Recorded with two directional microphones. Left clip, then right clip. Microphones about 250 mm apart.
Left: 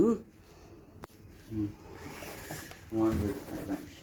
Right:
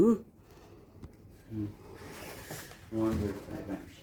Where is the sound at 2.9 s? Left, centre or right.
Centre.